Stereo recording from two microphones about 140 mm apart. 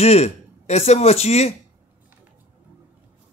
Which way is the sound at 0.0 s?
50° left (ahead or behind).